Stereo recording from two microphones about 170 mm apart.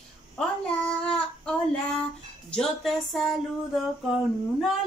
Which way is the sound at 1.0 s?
5° left (ahead or behind).